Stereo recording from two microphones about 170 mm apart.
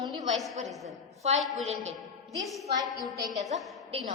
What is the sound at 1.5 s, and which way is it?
Speech, 40° right (ahead or behind).